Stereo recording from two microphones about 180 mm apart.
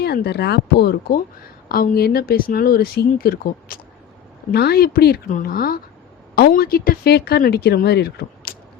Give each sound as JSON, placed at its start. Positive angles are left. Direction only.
{"t": 0.0, "sound": "speech", "side_deg": 65}